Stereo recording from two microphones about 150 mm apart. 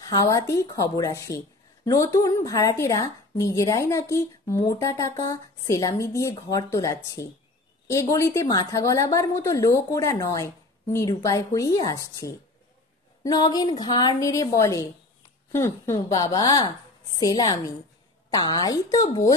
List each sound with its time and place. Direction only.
0.0 s a woman's voice: 25° left (ahead or behind)